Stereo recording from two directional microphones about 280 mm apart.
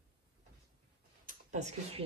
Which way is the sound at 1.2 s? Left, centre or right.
Right.